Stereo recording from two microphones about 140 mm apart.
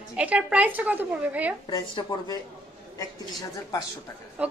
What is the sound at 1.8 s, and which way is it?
Speech, 30° left (ahead or behind).